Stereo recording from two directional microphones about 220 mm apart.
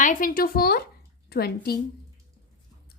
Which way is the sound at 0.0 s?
40° left (ahead or behind).